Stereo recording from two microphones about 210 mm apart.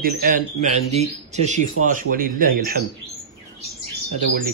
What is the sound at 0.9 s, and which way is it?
Speech, 35° right (ahead or behind).